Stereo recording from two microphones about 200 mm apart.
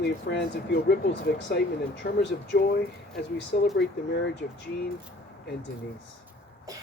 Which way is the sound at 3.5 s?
45° left (ahead or behind).